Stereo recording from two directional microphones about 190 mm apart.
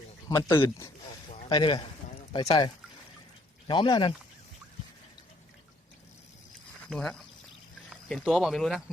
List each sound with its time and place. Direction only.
0.3 s speech: 15° left (ahead or behind)
1.5 s speech: 25° left (ahead or behind)
6.7 s a sound: 5° left (ahead or behind)
8.0 s speech: centre (ahead or behind)